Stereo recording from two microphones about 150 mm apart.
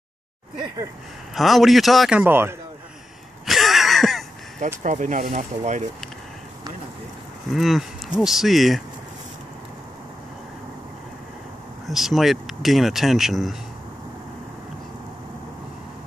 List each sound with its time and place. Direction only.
1.3 s speech: centre (ahead or behind); by 2.5 s 15° right (ahead or behind)
3.4 s a sound: centre (ahead or behind)
4.6 s speech: 55° right (ahead or behind)
7.5 s speech: centre (ahead or behind)
11.9 s speech: centre (ahead or behind)